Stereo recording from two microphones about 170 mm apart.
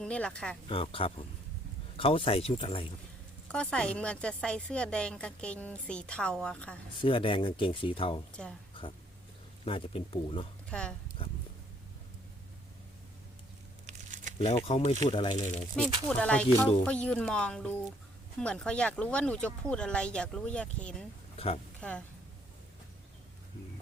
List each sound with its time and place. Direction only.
0.0 s speech: 5° left (ahead or behind)
0.7 s speech: 30° left (ahead or behind)
3.5 s speech: 5° left (ahead or behind)
7.0 s speech: 30° left (ahead or behind)
9.6 s speech: 30° left (ahead or behind)
10.7 s speech: 5° left (ahead or behind)
13.8 s crumpling: 45° right (ahead or behind)
14.3 s speech: 40° left (ahead or behind)
16.0 s speech: 5° left (ahead or behind)
21.3 s a woman's voice: 35° left (ahead or behind)
21.8 s speech: 5° left (ahead or behind)